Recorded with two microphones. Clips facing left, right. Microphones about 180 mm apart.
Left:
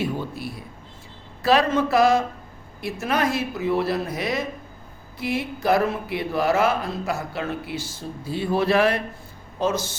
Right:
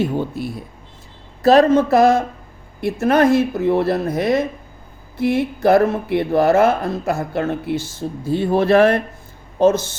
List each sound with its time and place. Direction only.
0.0 s speech: 50° right (ahead or behind)